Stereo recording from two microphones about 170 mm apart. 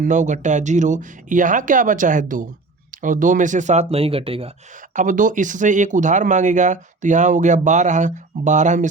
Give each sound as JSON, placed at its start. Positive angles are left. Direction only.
{"t": 0.0, "sound": "speech", "side_deg": -45}
{"t": 4.9, "sound": "speech", "side_deg": -50}